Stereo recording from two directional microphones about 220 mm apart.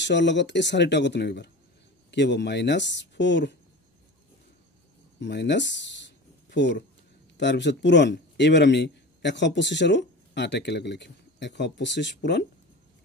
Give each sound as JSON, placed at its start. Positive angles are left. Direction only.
{"t": 0.0, "sound": "a man's voice", "side_deg": 55}
{"t": 5.2, "sound": "a sound", "side_deg": 50}
{"t": 7.3, "sound": "a man's voice", "side_deg": 50}